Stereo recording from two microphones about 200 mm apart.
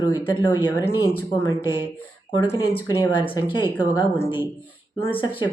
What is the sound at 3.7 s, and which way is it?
Speech, 15° left (ahead or behind).